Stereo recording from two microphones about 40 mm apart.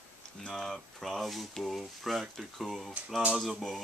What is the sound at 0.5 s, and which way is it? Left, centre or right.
Speech, centre.